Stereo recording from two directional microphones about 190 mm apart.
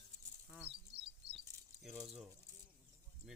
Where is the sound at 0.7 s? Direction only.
30° right (ahead or behind).